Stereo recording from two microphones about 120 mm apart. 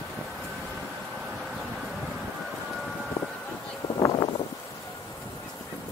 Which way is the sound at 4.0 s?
35° left (ahead or behind).